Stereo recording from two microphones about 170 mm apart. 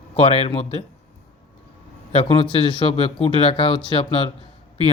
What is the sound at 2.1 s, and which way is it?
Speech, 35° left (ahead or behind).